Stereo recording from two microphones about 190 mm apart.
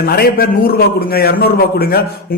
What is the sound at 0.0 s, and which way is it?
Speech, 50° left (ahead or behind).